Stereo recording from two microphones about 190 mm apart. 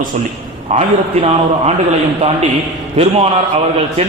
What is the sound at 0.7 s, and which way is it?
A man's voice, 35° right (ahead or behind).